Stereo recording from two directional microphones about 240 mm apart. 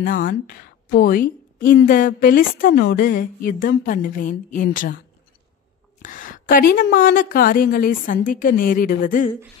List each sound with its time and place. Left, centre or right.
0.0 s a woman's voice: left
6.0 s a woman's voice: left